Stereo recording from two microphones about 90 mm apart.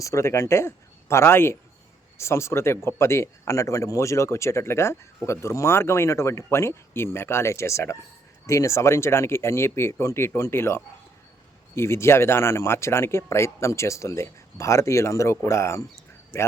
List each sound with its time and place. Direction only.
0.0 s speech: 35° left (ahead or behind)